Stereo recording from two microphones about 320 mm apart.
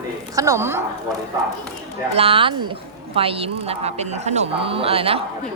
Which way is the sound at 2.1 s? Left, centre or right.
Centre.